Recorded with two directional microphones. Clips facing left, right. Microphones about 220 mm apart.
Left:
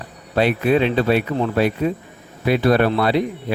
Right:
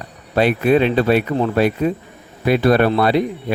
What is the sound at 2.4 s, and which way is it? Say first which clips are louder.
Speech: right 2 dB; 50° right (ahead or behind).